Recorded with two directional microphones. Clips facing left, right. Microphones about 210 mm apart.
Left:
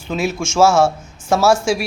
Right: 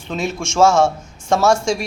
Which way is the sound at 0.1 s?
5° left (ahead or behind).